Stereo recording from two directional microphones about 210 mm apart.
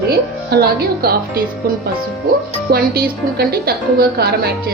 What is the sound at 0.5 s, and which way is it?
A woman's voice, 45° right (ahead or behind).